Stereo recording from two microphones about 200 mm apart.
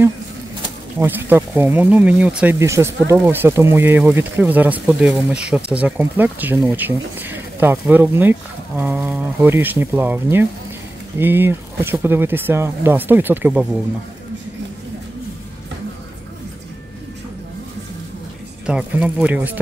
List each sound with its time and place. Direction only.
0.9 s speech: 10° right (ahead or behind)
18.7 s speech: 5° right (ahead or behind)